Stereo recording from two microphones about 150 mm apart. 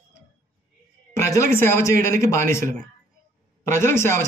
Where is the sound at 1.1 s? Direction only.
20° left (ahead or behind).